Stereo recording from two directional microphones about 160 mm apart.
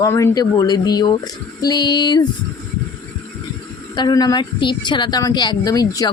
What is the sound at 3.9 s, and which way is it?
Speech, 25° left (ahead or behind).